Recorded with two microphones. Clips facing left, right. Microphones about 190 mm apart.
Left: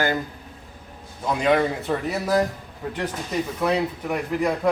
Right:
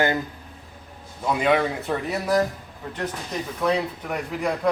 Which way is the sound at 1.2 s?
Centre (ahead or behind).